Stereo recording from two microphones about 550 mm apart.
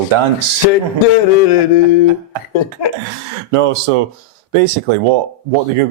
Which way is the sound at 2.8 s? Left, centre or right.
Left.